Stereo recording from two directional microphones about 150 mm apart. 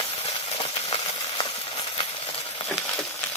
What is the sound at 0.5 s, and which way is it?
Engine, 40° left (ahead or behind).